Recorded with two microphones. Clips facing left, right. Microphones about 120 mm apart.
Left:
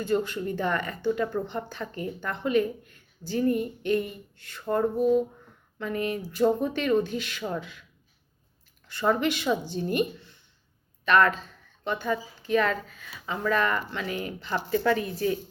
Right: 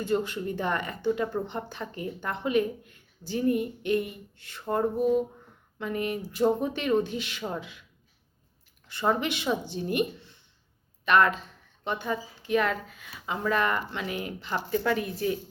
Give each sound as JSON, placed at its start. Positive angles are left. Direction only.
{"t": 0.0, "sound": "speech", "side_deg": -20}
{"t": 8.9, "sound": "speech", "side_deg": -25}